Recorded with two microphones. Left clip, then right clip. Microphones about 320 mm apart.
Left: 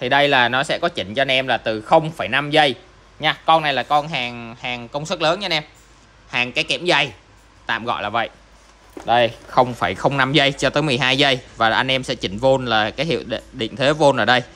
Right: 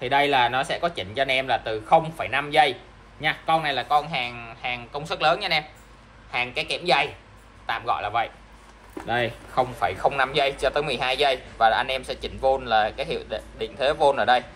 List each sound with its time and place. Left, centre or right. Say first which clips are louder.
0.0 s speech: left 5 dB; left